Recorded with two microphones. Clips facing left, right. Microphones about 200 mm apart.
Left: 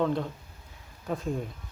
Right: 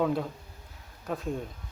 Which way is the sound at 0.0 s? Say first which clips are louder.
Even; 5° right (ahead or behind).